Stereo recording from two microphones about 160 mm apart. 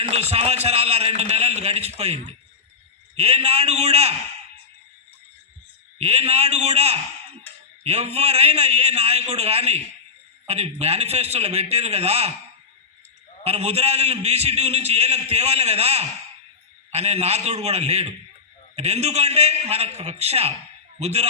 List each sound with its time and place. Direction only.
0.0 s a man's voice: 40° right (ahead or behind)
6.0 s a man's voice: 40° right (ahead or behind)
7.5 s a sound: 10° left (ahead or behind)
7.9 s a man's voice: 40° right (ahead or behind)
13.4 s a man's voice: 40° right (ahead or behind)